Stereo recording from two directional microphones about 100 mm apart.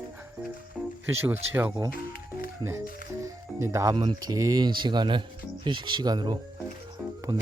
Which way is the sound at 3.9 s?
50° right (ahead or behind).